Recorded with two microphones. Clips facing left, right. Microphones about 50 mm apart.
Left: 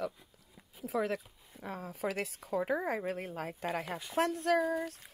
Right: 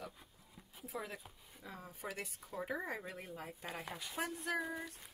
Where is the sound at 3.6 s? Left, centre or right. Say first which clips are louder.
Left 10 dB; left.